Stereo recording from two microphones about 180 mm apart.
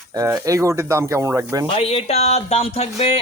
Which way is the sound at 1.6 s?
35° left (ahead or behind).